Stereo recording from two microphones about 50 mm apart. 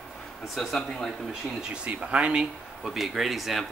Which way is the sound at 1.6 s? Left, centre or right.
Centre.